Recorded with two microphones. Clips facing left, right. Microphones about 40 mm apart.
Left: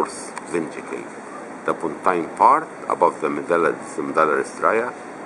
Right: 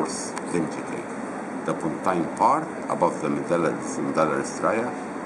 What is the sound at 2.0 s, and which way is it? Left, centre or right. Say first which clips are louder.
Speech: left 6 dB; left.